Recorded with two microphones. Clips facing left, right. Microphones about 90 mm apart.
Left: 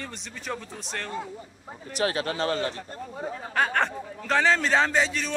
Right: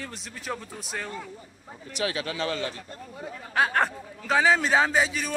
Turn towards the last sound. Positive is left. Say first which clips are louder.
# even
turn(degrees=-10)  # may be behind; listen again after turning